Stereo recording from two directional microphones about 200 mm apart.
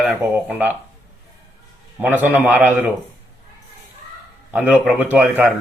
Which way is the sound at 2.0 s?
10° right (ahead or behind).